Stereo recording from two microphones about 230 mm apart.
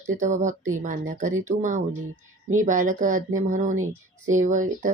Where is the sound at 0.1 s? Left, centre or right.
Right.